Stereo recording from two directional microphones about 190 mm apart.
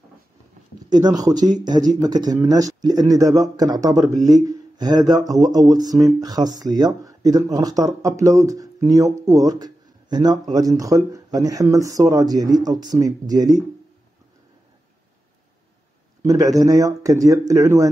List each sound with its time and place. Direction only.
0.8 s speech: 20° right (ahead or behind)
16.3 s speech: 20° right (ahead or behind)